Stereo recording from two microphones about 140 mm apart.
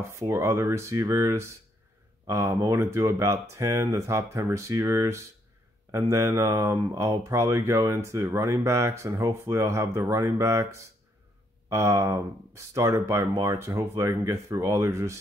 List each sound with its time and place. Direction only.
0.1 s speech: 20° right (ahead or behind)